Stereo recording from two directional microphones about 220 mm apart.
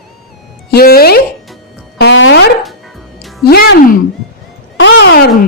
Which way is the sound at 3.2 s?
Centre (ahead or behind).